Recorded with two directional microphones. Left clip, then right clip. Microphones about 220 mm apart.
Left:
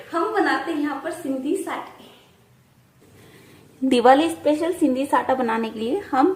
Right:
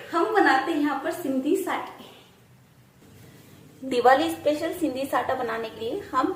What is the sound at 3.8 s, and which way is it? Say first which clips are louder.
A woman's voice: left 4 dB; 45° left (ahead or behind).